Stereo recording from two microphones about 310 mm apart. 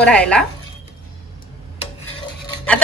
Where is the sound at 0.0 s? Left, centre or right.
Centre.